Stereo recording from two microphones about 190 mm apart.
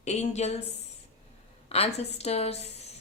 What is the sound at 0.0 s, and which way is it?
Speech, 35° left (ahead or behind).